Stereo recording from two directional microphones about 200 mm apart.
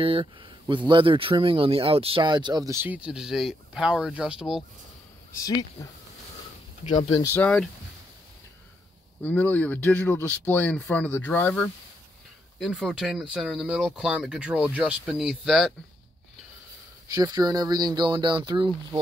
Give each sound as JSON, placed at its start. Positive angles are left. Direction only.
{"t": 0.0, "sound": "speech", "side_deg": -25}
{"t": 5.3, "sound": "speech", "side_deg": 15}
{"t": 6.8, "sound": "speech", "side_deg": 25}
{"t": 7.3, "sound": "speech", "side_deg": 5}
{"t": 9.2, "sound": "speech", "side_deg": 10}
{"t": 17.1, "sound": "speech", "side_deg": -20}